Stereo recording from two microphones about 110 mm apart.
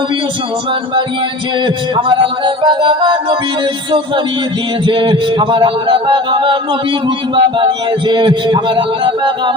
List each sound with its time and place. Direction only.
1.6 s a man's voice: 45° right (ahead or behind)
4.9 s a man's voice: 50° right (ahead or behind)